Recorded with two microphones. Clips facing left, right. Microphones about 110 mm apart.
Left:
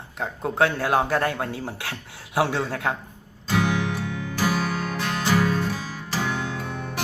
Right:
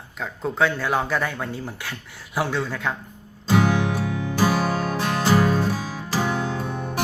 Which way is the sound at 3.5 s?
30° right (ahead or behind).